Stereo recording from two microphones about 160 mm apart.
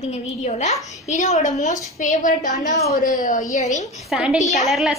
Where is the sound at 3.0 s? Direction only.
55° left (ahead or behind).